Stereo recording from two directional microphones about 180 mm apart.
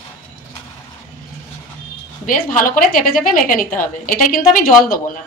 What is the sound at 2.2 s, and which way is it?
A woman's voice, 50° left (ahead or behind).